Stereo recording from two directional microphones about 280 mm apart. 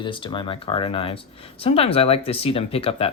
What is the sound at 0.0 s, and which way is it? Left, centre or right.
Speech, centre.